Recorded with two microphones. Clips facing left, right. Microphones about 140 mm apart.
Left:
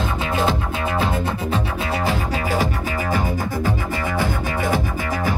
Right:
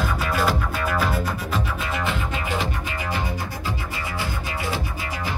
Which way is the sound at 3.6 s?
50° left (ahead or behind).